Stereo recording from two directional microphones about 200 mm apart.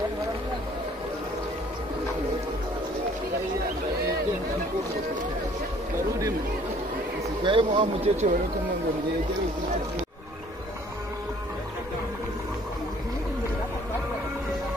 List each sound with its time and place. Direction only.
7.4 s speech: 25° right (ahead or behind)